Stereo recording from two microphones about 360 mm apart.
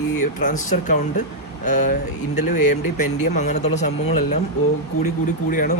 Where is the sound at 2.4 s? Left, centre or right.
Left.